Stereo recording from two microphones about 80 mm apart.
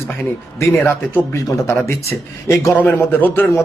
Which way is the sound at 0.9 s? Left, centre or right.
Left.